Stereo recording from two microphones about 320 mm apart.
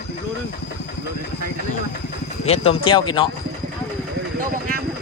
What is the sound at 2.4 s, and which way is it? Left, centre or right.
Speech, centre.